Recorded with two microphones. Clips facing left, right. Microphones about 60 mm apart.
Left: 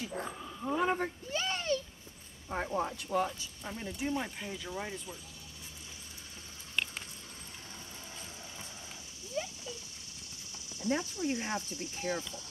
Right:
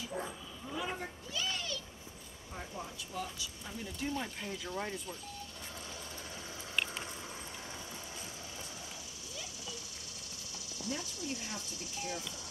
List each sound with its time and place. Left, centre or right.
0.2 s dog: left
2.5 s speech: left
3.3 s speech: left
4.0 s speech: centre
4.5 s speech: centre
9.3 s a sound: left
10.8 s speech: left